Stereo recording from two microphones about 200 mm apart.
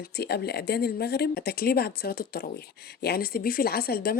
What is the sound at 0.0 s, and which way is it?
Speech, 55° left (ahead or behind).